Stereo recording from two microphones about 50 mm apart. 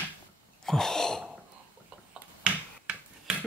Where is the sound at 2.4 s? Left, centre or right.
Right.